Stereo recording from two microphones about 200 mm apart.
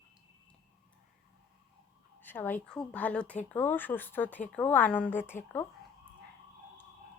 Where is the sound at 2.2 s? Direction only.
10° left (ahead or behind).